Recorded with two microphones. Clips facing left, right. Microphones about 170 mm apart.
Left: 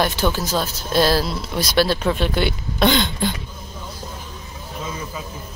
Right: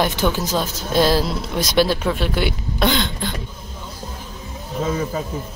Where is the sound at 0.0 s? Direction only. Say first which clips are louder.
Right 1 dB; 15° right (ahead or behind).